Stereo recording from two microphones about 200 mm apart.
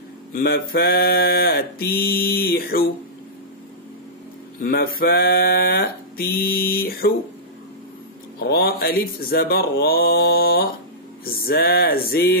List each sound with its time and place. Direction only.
0.3 s mantra: 50° left (ahead or behind)
4.6 s mantra: 50° left (ahead or behind)
8.5 s mantra: 50° left (ahead or behind)